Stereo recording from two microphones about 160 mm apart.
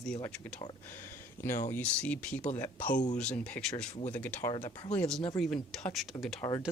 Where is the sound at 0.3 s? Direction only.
5° left (ahead or behind).